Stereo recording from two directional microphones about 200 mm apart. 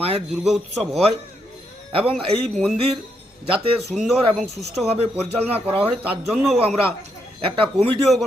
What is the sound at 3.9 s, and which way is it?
Speech, centre (ahead or behind).